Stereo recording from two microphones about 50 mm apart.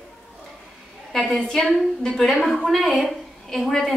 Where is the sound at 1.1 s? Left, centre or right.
Centre.